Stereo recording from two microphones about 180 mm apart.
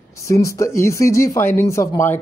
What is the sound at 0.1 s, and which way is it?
Speech, 15° left (ahead or behind).